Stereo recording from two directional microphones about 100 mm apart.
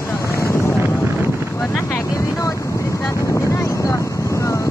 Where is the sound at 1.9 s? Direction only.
30° left (ahead or behind).